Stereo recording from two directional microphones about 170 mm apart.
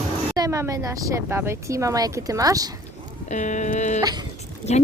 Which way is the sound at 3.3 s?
45° left (ahead or behind).